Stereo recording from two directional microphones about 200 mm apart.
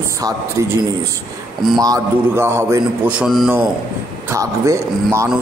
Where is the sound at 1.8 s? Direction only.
15° right (ahead or behind); by 3.5 s centre (ahead or behind).